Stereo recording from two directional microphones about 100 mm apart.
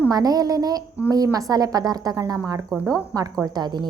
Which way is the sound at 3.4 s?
45° right (ahead or behind).